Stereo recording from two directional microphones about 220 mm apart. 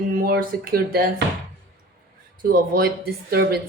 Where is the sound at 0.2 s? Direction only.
40° right (ahead or behind).